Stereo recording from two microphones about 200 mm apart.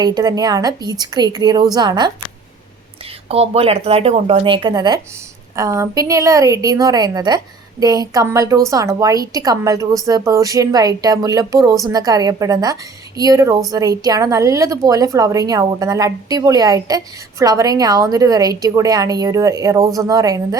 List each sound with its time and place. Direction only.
0.0 s speech: 20° right (ahead or behind)
3.2 s a woman's voice: 30° right (ahead or behind)